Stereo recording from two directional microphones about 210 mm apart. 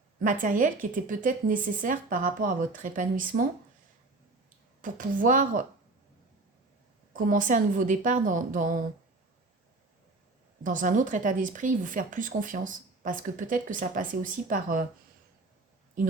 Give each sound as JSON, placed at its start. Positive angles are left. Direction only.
{"t": 0.2, "sound": "speech", "side_deg": -40}
{"t": 4.8, "sound": "speech", "side_deg": -40}
{"t": 7.1, "sound": "speech", "side_deg": -40}
{"t": 10.6, "sound": "speech", "side_deg": -40}